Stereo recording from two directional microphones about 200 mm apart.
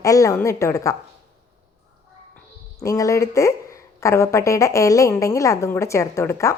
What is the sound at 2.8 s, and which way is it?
A woman's voice, 15° left (ahead or behind).